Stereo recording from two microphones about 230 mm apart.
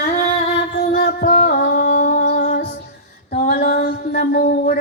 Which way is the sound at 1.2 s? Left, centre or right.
Left.